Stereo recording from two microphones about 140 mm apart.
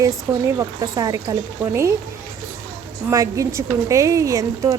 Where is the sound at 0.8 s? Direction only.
25° right (ahead or behind).